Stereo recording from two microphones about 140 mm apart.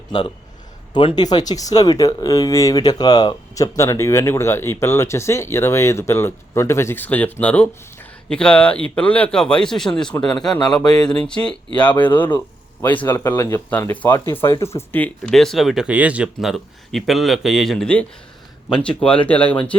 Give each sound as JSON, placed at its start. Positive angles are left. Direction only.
{"t": 0.9, "sound": "speech", "side_deg": 30}